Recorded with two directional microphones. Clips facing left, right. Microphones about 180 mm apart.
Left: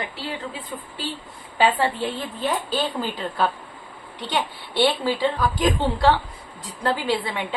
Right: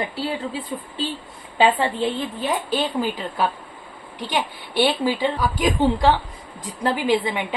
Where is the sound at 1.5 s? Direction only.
15° right (ahead or behind).